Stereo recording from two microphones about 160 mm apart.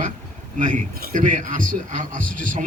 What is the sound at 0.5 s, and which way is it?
A man's voice, 55° right (ahead or behind).